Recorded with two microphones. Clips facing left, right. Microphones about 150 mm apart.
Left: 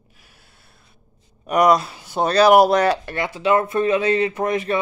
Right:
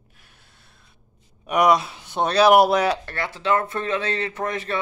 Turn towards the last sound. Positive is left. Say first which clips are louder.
# left 6 dB
turn(degrees=15)  # may be behind; listen again after turning